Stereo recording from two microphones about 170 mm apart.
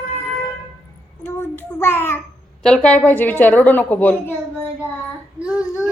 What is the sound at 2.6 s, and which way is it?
A woman's voice, 5° left (ahead or behind).